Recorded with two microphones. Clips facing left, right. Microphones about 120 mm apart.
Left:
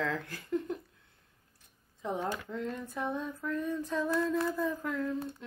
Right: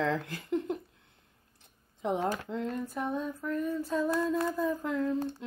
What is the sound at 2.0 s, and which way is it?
Speech, 15° right (ahead or behind).